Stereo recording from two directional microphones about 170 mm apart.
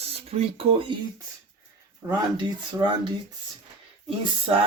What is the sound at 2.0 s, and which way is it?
Speech, 25° right (ahead or behind).